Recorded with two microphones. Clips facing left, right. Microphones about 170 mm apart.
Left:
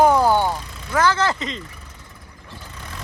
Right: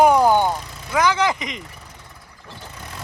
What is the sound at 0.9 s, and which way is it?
Vehicle, 15° right (ahead or behind).